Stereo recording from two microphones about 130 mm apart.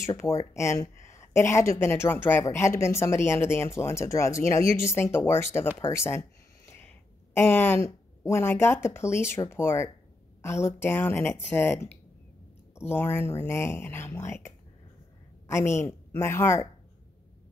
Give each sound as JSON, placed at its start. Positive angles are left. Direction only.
{"t": 0.0, "sound": "a woman's voice", "side_deg": 25}